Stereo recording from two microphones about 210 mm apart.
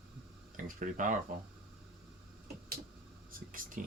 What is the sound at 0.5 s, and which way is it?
Speech, 40° right (ahead or behind).